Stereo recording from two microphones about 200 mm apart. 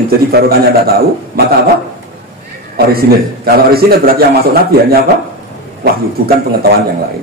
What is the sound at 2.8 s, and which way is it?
A man's voice, 50° right (ahead or behind).